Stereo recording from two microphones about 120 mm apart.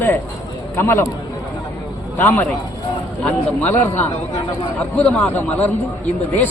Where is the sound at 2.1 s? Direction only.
15° left (ahead or behind).